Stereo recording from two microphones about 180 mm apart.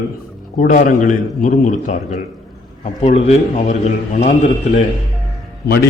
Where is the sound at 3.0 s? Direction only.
40° left (ahead or behind).